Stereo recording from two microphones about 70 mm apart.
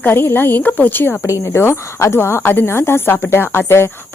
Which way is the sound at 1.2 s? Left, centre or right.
Left.